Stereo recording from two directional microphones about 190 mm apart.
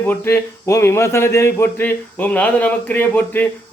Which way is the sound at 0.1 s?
10° left (ahead or behind).